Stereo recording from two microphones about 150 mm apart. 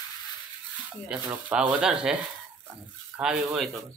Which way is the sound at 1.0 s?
10° right (ahead or behind).